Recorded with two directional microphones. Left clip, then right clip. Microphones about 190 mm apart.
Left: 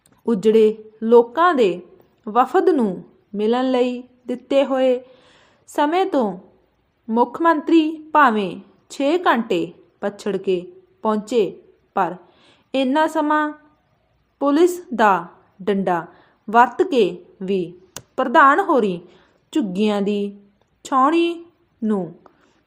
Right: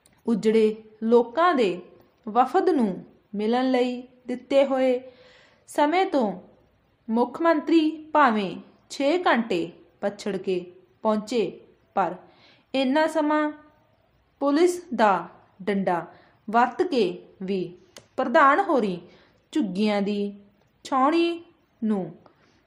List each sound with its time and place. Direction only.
0.2 s a woman's voice: 15° left (ahead or behind)